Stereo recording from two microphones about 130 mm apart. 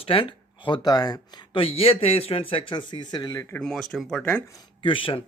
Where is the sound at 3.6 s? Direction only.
5° left (ahead or behind).